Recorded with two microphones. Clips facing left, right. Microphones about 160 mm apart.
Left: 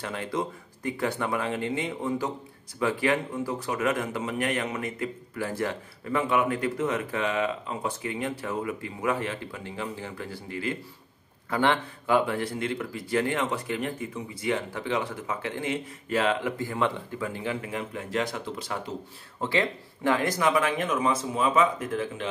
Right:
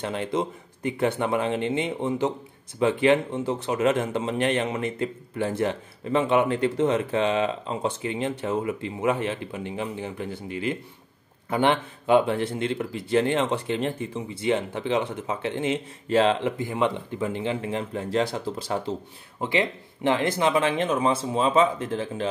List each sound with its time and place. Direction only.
0.0 s speech: 20° right (ahead or behind)
19.4 s speech: 20° right (ahead or behind)